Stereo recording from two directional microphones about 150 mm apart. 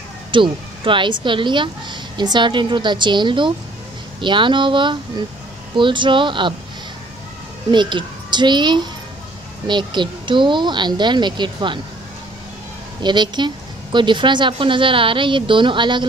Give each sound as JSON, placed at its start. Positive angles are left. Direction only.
{"t": 0.3, "sound": "speech", "side_deg": -35}
{"t": 7.7, "sound": "speech", "side_deg": -30}
{"t": 13.0, "sound": "a woman's voice", "side_deg": -30}